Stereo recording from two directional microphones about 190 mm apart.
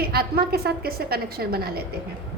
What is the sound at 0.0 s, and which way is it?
A woman's voice, 55° right (ahead or behind).